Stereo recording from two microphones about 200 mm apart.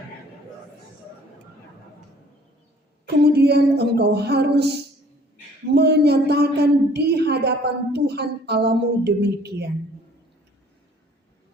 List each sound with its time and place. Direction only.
3.2 s music: 55° right (ahead or behind)
5.6 s a woman's voice: 55° right (ahead or behind)